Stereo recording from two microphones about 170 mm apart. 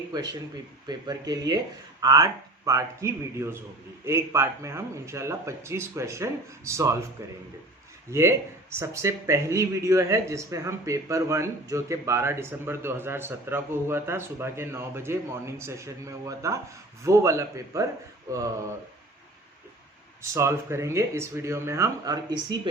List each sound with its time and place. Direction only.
0.1 s speech: 25° right (ahead or behind)
20.3 s speech: 15° right (ahead or behind)